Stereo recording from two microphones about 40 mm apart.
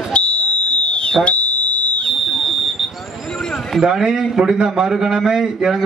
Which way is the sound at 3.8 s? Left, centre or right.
Centre.